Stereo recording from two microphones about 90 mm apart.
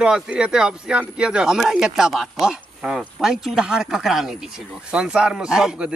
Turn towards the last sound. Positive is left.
turn(degrees=-10)  # may be behind; listen again after turning